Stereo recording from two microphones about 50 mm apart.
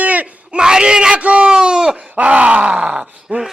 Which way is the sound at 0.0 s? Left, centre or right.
Right.